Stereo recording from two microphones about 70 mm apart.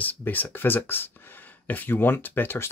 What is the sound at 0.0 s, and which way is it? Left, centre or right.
Speech, left.